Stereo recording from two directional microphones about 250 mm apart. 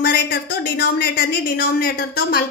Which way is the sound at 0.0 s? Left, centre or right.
Left.